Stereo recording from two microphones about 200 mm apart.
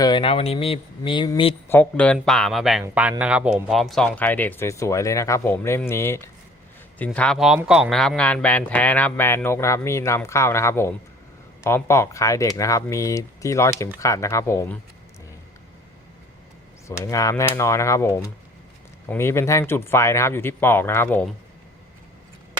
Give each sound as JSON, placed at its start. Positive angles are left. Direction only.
{"t": 0.0, "sound": "speech", "side_deg": 25}
{"t": 1.6, "sound": "speech", "side_deg": 10}
{"t": 17.0, "sound": "speech", "side_deg": 15}